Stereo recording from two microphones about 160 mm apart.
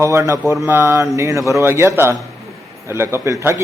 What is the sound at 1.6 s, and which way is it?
A man's voice, 15° right (ahead or behind).